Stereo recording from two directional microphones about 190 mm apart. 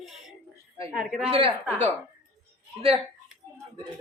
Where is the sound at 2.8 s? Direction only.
30° right (ahead or behind).